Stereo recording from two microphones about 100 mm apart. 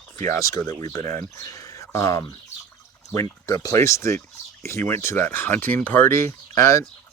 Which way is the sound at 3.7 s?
30° left (ahead or behind).